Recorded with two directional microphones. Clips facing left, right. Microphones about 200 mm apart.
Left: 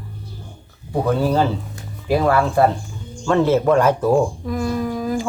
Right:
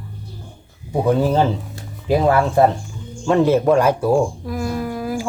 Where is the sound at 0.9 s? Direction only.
15° right (ahead or behind).